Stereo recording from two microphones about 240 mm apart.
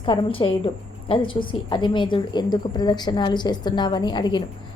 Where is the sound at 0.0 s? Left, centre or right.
Centre.